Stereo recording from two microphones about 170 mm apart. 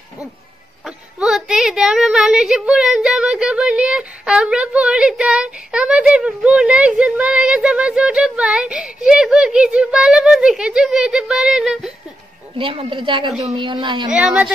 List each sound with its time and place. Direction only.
0.8 s a woman's voice: 5° right (ahead or behind)
12.5 s a woman's voice: 30° right (ahead or behind)
14.1 s a woman's voice: 5° right (ahead or behind)